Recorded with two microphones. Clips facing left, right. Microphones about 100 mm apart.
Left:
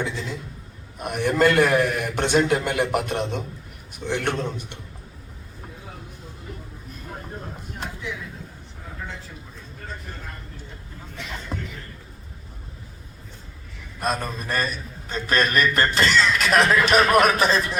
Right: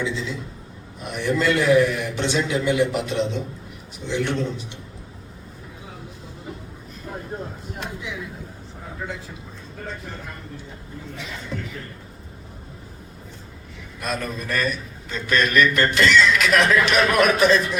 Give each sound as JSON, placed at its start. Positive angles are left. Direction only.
{"t": 0.0, "sound": "a man's voice", "side_deg": 50}
{"t": 11.5, "sound": "a sound", "side_deg": 40}
{"t": 14.0, "sound": "speech", "side_deg": 35}